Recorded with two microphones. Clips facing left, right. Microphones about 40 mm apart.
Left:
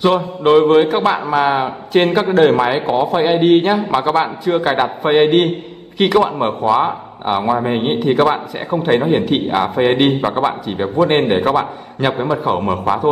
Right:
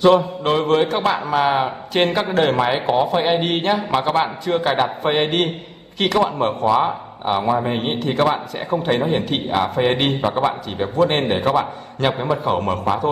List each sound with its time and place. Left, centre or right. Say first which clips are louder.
0.0 s a man's voice: even; centre